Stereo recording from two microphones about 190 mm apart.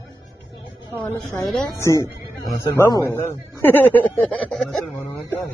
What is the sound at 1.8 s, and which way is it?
Speech, 15° left (ahead or behind).